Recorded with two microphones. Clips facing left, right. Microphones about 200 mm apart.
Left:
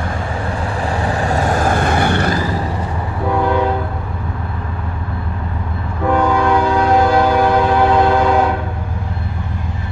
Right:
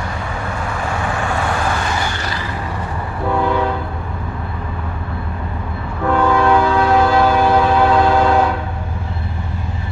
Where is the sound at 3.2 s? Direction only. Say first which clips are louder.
Left 1 dB; 10° left (ahead or behind).